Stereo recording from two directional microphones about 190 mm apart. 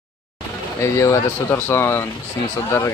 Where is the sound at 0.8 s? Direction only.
15° left (ahead or behind).